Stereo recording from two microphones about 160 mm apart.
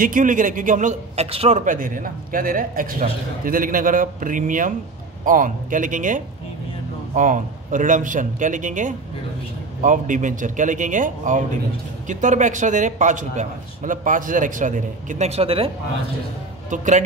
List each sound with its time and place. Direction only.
0.0 s a man's voice: 55° right (ahead or behind); by 1.6 s 40° right (ahead or behind)
1.6 s a man's voice: 60° right (ahead or behind); by 15.7 s 35° right (ahead or behind)
16.7 s a man's voice: 50° right (ahead or behind)